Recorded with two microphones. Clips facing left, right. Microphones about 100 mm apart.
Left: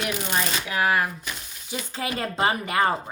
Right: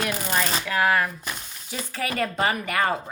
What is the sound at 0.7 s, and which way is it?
A woman's voice, 15° left (ahead or behind).